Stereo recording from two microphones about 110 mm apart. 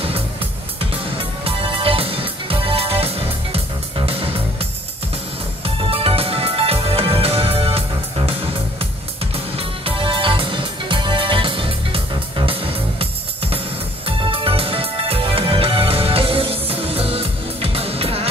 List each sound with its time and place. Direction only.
0.7 s music: 55° right (ahead or behind)
5.8 s music: 55° right (ahead or behind)